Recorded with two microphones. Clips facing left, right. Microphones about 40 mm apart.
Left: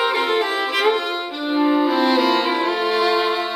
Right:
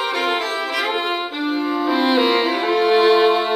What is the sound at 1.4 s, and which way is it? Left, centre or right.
Music, centre.